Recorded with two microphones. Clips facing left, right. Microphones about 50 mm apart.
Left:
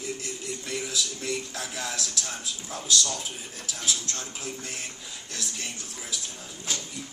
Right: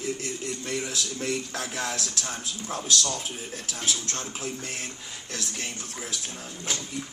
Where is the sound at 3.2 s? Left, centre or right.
Right.